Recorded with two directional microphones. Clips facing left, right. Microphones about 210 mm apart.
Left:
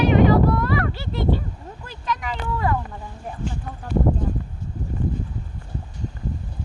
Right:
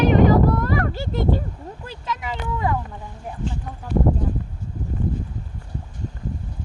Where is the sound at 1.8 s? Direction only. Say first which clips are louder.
Left 2 dB; 25° right (ahead or behind).